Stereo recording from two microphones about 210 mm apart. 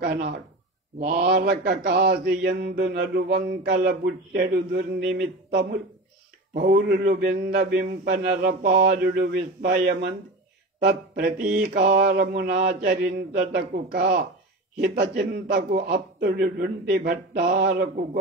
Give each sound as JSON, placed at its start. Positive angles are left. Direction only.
{"t": 0.9, "sound": "mantra", "side_deg": -45}
{"t": 5.5, "sound": "speech", "side_deg": -55}
{"t": 6.5, "sound": "mantra", "side_deg": -45}